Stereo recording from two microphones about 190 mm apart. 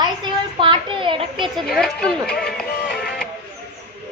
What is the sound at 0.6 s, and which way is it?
Speech, 25° right (ahead or behind).